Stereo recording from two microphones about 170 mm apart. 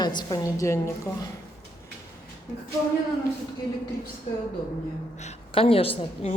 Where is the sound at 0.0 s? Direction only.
25° left (ahead or behind).